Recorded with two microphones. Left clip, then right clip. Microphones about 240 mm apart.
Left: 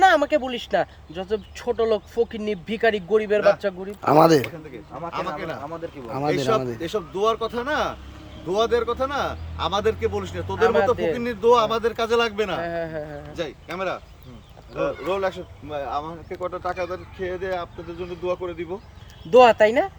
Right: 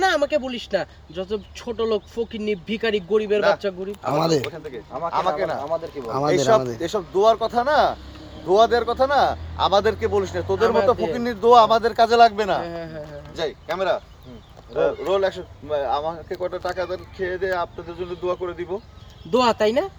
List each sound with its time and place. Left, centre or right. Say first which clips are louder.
0.0 s speech: left 3 dB; centre
4.7 s speech: right 6 dB; centre
10.6 s speech: left 1 dB; centre
11.2 s speech: right 5 dB; centre
12.5 s speech: left 1 dB; centre
13.3 s speech: right 6 dB; centre
19.3 s speech: left 5 dB; centre